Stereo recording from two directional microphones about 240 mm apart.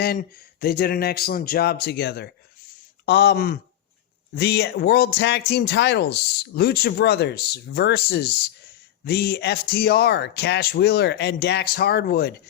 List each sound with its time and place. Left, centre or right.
0.0 s speech: left